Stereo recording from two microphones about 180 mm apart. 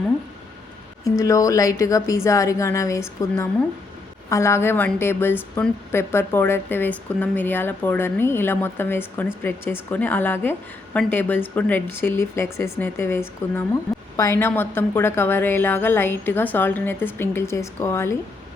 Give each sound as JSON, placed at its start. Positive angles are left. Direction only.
{"t": 1.0, "sound": "a woman's voice", "side_deg": 20}